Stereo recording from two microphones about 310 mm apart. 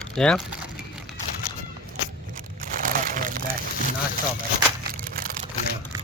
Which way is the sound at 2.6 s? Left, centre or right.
Right.